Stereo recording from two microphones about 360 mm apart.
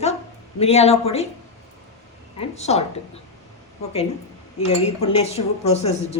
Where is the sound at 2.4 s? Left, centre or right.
Centre.